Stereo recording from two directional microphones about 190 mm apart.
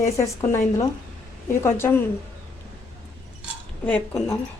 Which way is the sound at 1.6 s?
15° left (ahead or behind).